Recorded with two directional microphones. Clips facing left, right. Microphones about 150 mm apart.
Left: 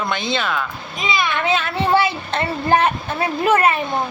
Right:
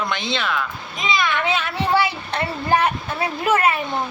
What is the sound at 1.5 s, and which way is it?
Speech, 15° right (ahead or behind).